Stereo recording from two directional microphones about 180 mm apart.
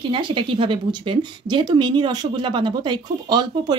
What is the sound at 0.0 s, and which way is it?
Speech, 25° right (ahead or behind).